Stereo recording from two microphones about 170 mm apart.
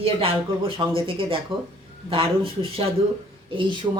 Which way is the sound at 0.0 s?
35° right (ahead or behind).